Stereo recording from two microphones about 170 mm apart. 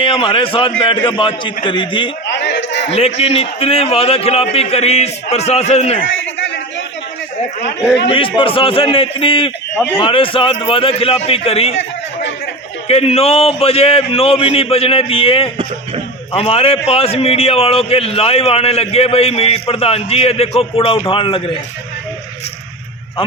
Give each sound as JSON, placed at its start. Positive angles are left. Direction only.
{"t": 0.0, "sound": "a man's voice", "side_deg": 30}
{"t": 2.2, "sound": "a sound", "side_deg": 90}
{"t": 2.9, "sound": "a man's voice", "side_deg": 40}
{"t": 6.4, "sound": "a sound", "side_deg": 90}
{"t": 8.1, "sound": "a man's voice", "side_deg": 30}
{"t": 12.9, "sound": "a man's voice", "side_deg": 35}